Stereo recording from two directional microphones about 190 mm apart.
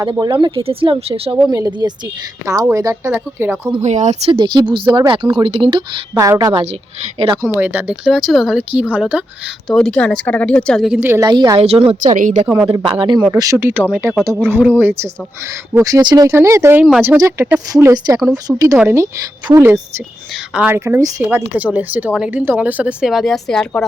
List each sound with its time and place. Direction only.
0.0 s a woman's voice: 25° right (ahead or behind)
1.5 s a woman's voice: 20° right (ahead or behind)
3.8 s speech: 35° right (ahead or behind)
4.3 s a woman's voice: 25° right (ahead or behind)
7.6 s a woman's voice: 10° right (ahead or behind); by 12.1 s 30° right (ahead or behind)
12.1 s a woman's voice: 45° right (ahead or behind)
12.5 s speech: 10° right (ahead or behind)
12.8 s a woman's voice: 25° right (ahead or behind); by 17.2 s 5° right (ahead or behind)
17.2 s speech: 15° right (ahead or behind)
18.7 s a woman's voice: 5° right (ahead or behind)
19.5 s speech: 15° right (ahead or behind); by 23.8 s 5° left (ahead or behind)